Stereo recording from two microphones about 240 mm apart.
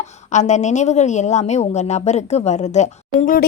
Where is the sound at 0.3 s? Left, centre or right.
Left.